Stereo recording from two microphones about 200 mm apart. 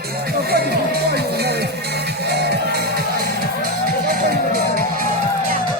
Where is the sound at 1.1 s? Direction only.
55° right (ahead or behind).